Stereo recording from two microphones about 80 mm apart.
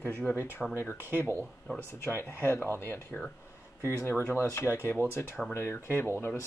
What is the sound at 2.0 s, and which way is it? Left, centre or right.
Speech, left.